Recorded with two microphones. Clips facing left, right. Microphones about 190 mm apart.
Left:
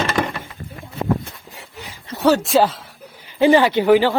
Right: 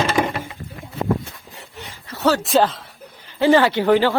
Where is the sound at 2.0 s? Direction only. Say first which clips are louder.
Left 3 dB; 15° left (ahead or behind).